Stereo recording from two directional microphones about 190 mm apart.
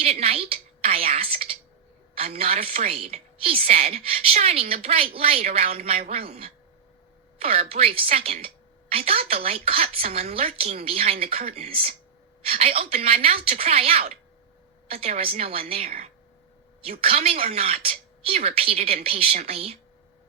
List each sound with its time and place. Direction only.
0.0 s a woman's voice: 30° right (ahead or behind)